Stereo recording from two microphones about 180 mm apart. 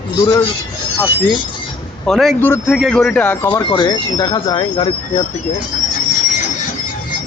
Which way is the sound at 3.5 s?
25° left (ahead or behind).